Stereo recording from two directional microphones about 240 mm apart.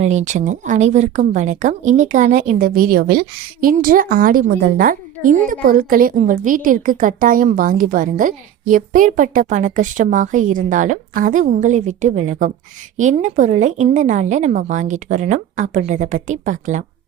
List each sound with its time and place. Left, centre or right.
0.0 s a woman's voice: right